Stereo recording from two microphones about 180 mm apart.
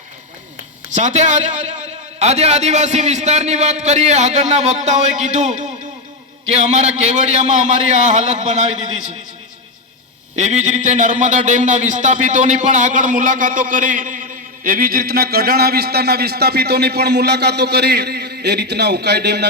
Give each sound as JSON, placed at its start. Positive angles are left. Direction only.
{"t": 0.9, "sound": "a man's voice", "side_deg": -40}
{"t": 10.3, "sound": "a man's voice", "side_deg": -40}